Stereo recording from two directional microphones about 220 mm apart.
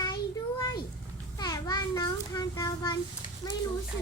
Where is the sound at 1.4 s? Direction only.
15° left (ahead or behind).